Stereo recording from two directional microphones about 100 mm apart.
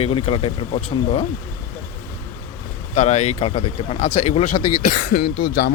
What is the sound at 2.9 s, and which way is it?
Speech, 90° left.